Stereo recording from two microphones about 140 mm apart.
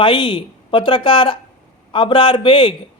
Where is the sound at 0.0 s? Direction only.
35° left (ahead or behind).